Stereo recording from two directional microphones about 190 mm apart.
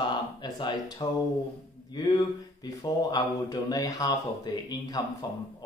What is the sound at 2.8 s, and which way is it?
Speech, 20° left (ahead or behind).